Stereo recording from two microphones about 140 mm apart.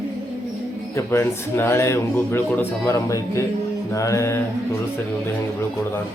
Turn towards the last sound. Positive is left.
turn(degrees=20)  # may be behind; listen again after turning